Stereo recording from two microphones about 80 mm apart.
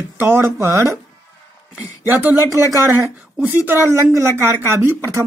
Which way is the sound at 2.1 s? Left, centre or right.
Right.